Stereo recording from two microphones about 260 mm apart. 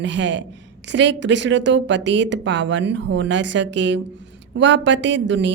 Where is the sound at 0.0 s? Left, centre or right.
Right.